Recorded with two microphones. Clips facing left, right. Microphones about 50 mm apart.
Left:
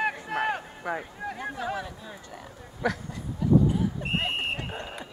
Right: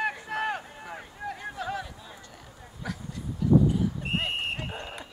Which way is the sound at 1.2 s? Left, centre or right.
Centre.